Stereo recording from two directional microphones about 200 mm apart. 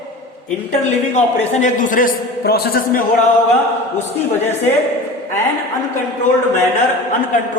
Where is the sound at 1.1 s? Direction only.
40° left (ahead or behind).